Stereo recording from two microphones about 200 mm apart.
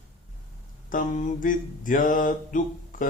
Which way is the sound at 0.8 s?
40° left (ahead or behind).